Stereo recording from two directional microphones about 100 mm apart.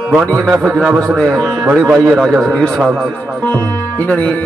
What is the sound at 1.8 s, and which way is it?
Speech, 20° right (ahead or behind).